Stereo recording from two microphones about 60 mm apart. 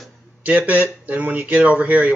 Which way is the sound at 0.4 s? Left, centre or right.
Right.